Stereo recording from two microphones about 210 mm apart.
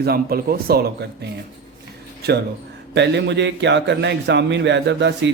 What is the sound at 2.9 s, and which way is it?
Speech, 55° right (ahead or behind).